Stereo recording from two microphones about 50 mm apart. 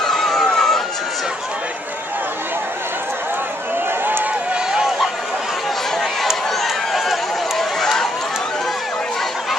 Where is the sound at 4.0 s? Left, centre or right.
Right.